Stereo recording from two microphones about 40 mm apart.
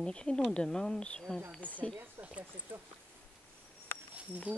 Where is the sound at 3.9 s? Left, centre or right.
Left.